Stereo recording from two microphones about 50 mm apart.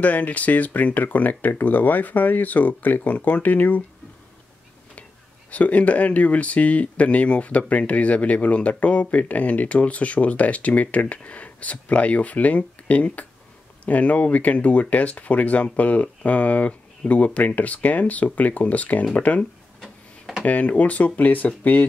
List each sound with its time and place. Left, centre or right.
0.0 s speech: left
5.5 s speech: left
19.8 s tick-tock: centre
20.4 s speech: left